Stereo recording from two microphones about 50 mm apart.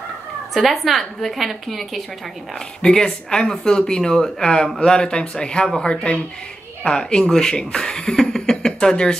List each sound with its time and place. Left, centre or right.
0.6 s a woman's voice: centre
2.8 s speech: centre